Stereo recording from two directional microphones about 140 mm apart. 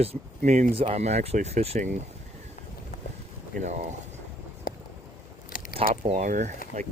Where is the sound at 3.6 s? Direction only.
55° right (ahead or behind).